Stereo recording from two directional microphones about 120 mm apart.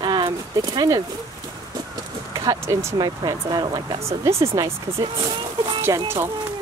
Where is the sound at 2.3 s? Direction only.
25° right (ahead or behind).